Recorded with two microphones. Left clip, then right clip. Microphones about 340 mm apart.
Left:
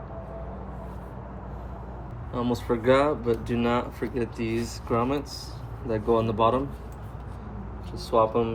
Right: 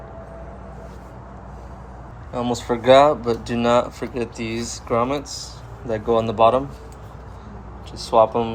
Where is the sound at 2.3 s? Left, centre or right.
Centre.